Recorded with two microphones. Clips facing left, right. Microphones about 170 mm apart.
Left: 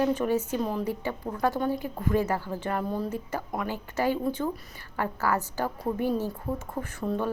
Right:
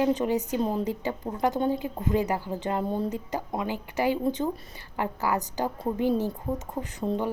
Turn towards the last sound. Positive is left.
turn(degrees=-20)  # may be behind; listen again after turning